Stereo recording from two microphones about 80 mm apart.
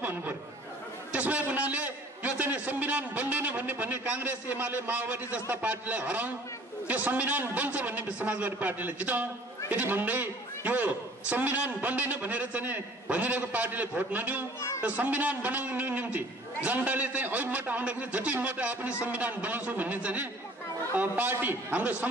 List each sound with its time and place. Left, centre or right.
0.0 s chatter: right
1.1 s a man's voice: centre